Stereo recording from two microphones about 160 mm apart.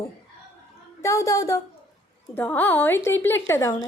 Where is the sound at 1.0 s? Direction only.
20° left (ahead or behind).